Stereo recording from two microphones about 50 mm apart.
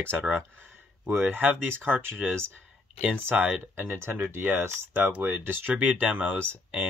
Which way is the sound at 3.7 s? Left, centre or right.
Right.